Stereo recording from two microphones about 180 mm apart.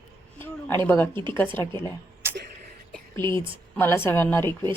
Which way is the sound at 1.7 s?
15° right (ahead or behind).